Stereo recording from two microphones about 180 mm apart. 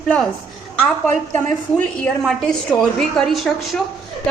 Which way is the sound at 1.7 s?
5° left (ahead or behind).